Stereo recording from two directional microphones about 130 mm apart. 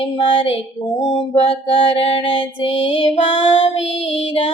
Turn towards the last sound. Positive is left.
turn(degrees=55)  # may be behind; listen again after turning